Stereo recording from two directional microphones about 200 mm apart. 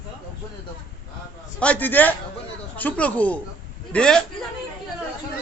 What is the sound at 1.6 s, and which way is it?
A man's voice, 5° left (ahead or behind).